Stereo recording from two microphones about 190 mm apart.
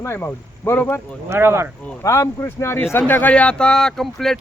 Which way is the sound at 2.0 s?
15° left (ahead or behind).